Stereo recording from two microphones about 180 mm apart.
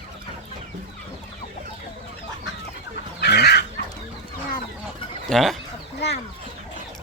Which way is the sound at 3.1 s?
65° left (ahead or behind).